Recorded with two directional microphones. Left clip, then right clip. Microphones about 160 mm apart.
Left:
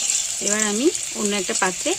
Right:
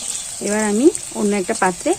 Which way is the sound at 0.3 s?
5° left (ahead or behind).